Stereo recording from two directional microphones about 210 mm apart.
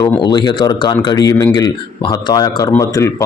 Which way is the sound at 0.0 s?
20° left (ahead or behind).